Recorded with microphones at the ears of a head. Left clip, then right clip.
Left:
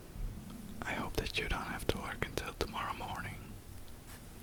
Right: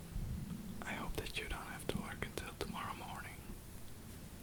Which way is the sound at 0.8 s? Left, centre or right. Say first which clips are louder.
Left 6 dB; left.